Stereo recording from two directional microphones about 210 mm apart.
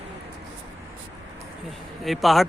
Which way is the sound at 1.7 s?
Centre (ahead or behind).